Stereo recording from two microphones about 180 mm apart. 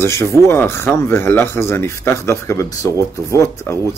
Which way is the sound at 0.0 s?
15° left (ahead or behind).